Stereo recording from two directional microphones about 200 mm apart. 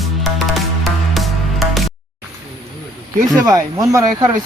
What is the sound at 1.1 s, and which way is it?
Music, centre (ahead or behind).